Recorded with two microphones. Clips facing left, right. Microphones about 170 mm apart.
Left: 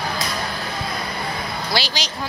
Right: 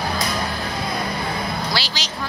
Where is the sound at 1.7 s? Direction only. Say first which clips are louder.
Left 3 dB; 15° left (ahead or behind).